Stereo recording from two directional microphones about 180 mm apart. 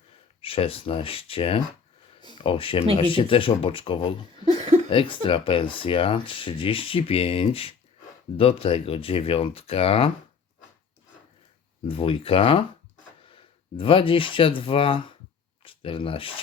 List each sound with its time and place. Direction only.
0.4 s speech: 30° left (ahead or behind)
4.5 s a sound: 40° right (ahead or behind)
4.9 s speech: 30° left (ahead or behind)
11.9 s speech: 30° left (ahead or behind)